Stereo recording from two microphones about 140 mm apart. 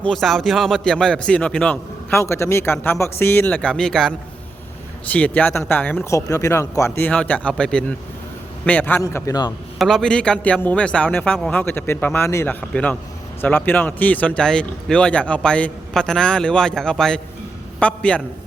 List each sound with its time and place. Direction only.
0.0 s speech: centre (ahead or behind); by 9.5 s 25° left (ahead or behind)
9.7 s a man's voice: centre (ahead or behind)